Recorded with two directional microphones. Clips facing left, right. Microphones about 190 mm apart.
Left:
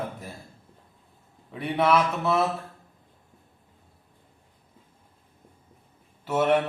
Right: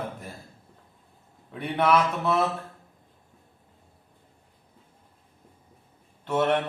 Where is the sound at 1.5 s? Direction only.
Centre (ahead or behind).